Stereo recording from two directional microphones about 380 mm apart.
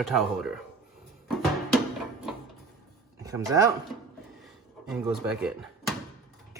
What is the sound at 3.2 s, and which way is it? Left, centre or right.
Speech, centre.